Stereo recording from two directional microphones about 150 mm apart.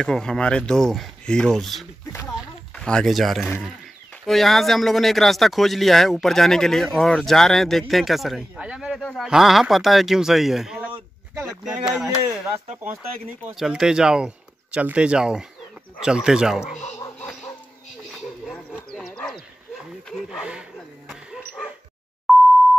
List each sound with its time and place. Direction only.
0.0 s speech: 5° left (ahead or behind)
13.6 s speech: 5° right (ahead or behind)
18.4 s a sound: centre (ahead or behind)
18.9 s dog: 5° left (ahead or behind)
20.1 s speech: centre (ahead or behind)
21.1 s dog: 5° right (ahead or behind)
22.3 s busy signal: centre (ahead or behind)